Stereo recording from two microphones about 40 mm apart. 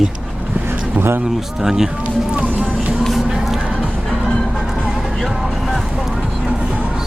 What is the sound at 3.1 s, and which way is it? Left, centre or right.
Music, centre.